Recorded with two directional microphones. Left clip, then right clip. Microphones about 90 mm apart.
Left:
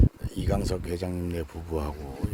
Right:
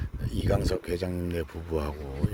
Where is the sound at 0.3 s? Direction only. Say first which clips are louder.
Right 7 dB; 25° left (ahead or behind).